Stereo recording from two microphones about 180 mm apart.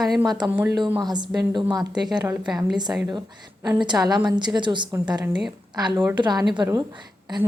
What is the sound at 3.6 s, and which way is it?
A woman's voice, 25° right (ahead or behind).